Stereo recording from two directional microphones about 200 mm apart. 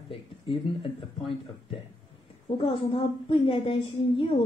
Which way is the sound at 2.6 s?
25° left (ahead or behind).